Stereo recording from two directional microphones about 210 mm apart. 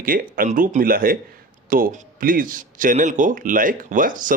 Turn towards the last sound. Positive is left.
turn(degrees=-40)  # may be behind; listen again after turning